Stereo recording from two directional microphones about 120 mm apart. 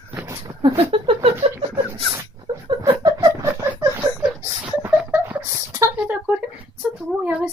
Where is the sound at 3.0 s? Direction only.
30° right (ahead or behind).